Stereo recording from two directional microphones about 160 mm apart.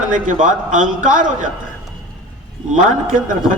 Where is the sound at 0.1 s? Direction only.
55° right (ahead or behind).